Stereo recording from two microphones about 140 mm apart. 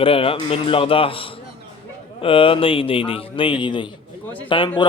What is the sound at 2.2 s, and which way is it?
Speech, 40° left (ahead or behind).